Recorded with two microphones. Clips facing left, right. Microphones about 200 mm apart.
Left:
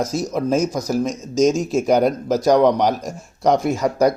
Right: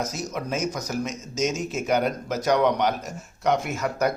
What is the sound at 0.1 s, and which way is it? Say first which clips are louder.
Speech: left 10 dB; 35° left (ahead or behind).